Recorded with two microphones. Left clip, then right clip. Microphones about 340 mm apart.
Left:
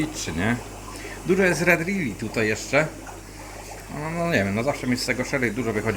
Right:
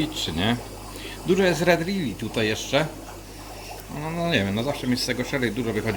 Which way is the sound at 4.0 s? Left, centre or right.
Centre.